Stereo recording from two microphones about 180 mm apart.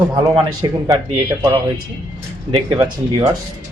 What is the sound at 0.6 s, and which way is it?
Speech, 25° right (ahead or behind).